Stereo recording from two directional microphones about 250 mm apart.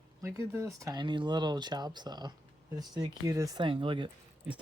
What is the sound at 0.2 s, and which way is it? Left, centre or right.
Speech, centre.